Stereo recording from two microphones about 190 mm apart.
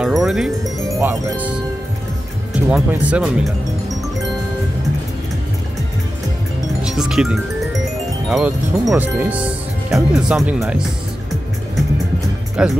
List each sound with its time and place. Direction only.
0.0 s music: centre (ahead or behind)
0.8 s speech: 15° right (ahead or behind)
2.7 s speech: 5° right (ahead or behind)
6.8 s speech: 5° right (ahead or behind)
12.6 s speech: 5° right (ahead or behind)